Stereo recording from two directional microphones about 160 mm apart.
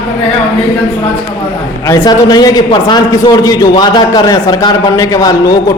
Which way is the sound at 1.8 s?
25° left (ahead or behind).